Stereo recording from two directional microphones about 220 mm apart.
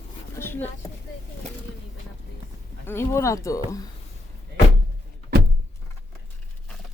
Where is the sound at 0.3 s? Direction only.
10° left (ahead or behind).